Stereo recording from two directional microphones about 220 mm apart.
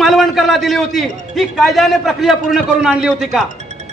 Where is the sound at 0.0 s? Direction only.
Centre (ahead or behind).